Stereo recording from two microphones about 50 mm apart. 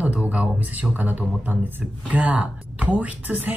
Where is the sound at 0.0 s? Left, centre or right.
Right.